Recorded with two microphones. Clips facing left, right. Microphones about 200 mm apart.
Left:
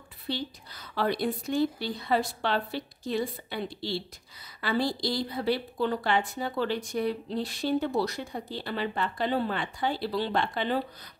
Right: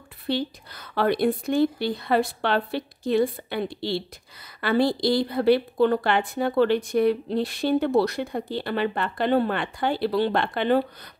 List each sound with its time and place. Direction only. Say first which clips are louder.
0.3 s a woman's voice: right 7 dB; 60° right (ahead or behind)